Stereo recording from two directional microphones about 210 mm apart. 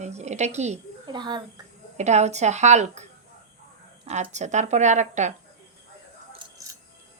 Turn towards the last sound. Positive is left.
turn(degrees=-35)  # may be behind; listen again after turning